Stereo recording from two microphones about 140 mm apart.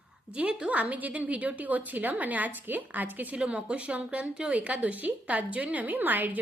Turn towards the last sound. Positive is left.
turn(degrees=-15)  # may be behind; listen again after turning